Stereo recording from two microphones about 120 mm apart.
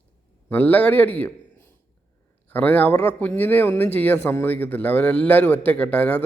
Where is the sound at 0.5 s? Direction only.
15° left (ahead or behind).